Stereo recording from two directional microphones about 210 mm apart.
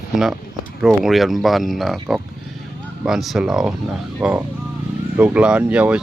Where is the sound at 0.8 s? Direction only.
Centre (ahead or behind).